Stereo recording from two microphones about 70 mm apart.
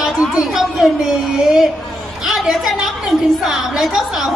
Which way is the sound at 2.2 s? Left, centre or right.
Centre.